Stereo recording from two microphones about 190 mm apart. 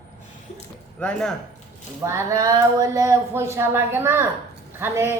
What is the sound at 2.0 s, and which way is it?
Speech, 15° right (ahead or behind).